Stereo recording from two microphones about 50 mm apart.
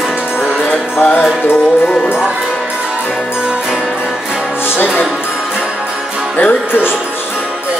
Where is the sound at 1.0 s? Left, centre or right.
Left.